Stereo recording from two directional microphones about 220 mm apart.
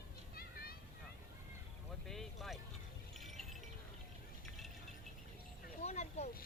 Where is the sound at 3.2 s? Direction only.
Centre (ahead or behind).